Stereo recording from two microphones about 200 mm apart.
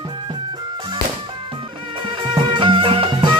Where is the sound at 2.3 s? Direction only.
25° right (ahead or behind).